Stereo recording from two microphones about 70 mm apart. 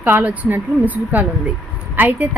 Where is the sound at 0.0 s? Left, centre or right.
Right.